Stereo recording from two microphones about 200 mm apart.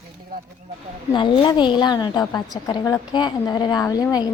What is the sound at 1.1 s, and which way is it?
A woman's voice, 25° left (ahead or behind).